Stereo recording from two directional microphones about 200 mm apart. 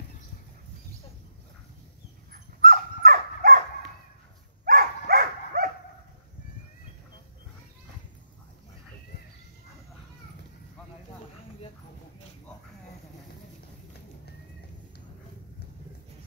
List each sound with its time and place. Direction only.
2.3 s dog: 45° right (ahead or behind)
4.6 s dog: 50° right (ahead or behind)